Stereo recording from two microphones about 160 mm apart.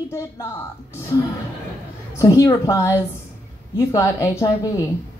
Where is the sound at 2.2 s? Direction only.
20° left (ahead or behind).